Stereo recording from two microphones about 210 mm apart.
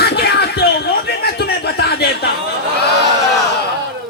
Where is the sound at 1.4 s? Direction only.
50° left (ahead or behind).